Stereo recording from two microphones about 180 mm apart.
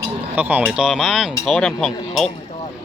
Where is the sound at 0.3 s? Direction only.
10° right (ahead or behind).